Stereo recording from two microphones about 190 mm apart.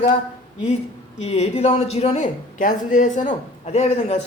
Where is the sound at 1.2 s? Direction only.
35° left (ahead or behind).